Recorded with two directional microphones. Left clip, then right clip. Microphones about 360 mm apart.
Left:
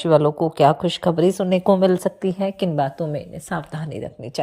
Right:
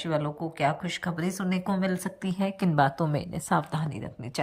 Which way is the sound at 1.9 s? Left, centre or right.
Centre.